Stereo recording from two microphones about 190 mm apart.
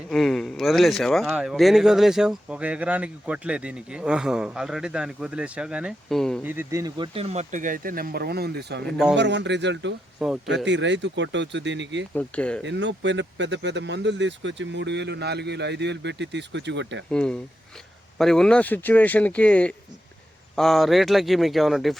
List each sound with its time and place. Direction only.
0.1 s speech: centre (ahead or behind)
6.4 s speech: 10° right (ahead or behind); by 8.9 s 60° right (ahead or behind)
8.9 s speech: 5° right (ahead or behind)
9.1 s speech: 65° right (ahead or behind)
10.2 s speech: 5° right (ahead or behind)
10.7 s speech: 70° right (ahead or behind)
12.1 s speech: 5° left (ahead or behind)
12.6 s speech: 70° right (ahead or behind)
17.1 s speech: 5° left (ahead or behind)